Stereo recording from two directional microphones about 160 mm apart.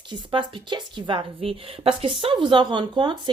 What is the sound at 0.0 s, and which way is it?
A woman's voice, 30° right (ahead or behind).